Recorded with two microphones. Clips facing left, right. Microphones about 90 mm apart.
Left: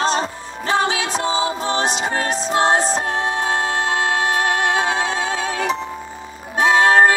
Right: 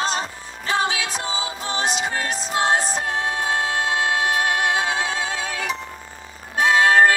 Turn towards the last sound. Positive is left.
turn(degrees=30)  # may be behind; listen again after turning